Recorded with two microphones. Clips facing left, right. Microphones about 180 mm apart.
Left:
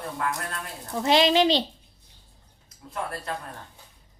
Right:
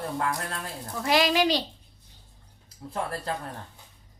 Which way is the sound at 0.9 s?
25° left (ahead or behind).